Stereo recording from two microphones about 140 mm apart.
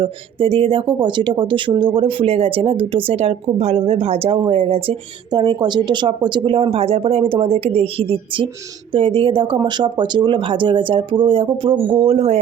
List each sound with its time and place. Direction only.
0.0 s speech: 40° right (ahead or behind)